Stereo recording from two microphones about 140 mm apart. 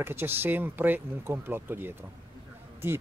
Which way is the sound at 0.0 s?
15° right (ahead or behind).